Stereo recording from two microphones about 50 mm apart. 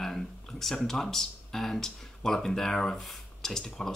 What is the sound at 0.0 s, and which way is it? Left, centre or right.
Speech, centre.